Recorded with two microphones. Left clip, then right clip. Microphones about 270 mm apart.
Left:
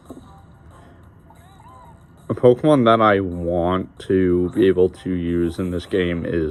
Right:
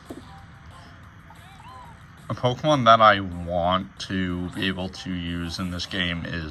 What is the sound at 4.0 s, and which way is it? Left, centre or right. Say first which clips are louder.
Speech: left 12 dB; right.